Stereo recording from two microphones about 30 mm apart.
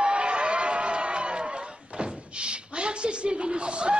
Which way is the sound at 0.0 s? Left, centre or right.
Right.